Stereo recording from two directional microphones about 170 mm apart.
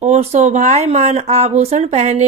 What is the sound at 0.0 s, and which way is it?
Speech, 40° right (ahead or behind).